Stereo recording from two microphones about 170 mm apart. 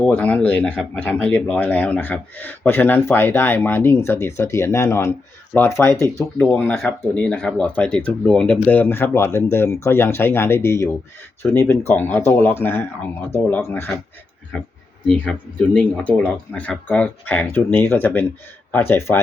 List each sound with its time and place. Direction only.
0.0 s speech: 10° left (ahead or behind)